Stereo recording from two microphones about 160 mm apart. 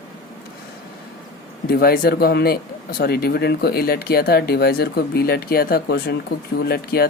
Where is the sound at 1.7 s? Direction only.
70° left (ahead or behind).